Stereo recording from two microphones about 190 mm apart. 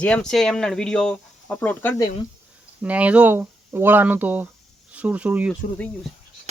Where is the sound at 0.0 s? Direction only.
5° left (ahead or behind).